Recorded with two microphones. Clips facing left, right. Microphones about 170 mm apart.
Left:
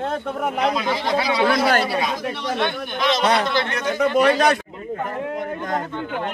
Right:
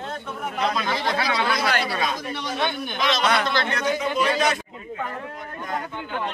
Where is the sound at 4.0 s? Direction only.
65° left (ahead or behind).